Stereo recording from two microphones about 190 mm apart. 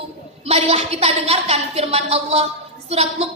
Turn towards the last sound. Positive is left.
turn(degrees=-35)  # may be behind; listen again after turning